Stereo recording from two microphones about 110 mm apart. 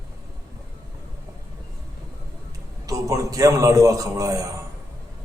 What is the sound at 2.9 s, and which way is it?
A man's voice, 30° right (ahead or behind).